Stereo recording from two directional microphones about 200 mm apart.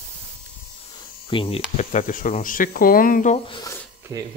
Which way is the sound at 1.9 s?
40° left (ahead or behind).